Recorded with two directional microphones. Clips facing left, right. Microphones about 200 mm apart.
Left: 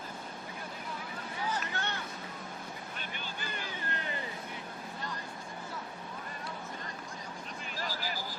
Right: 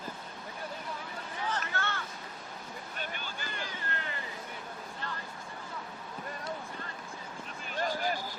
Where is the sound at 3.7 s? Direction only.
15° left (ahead or behind).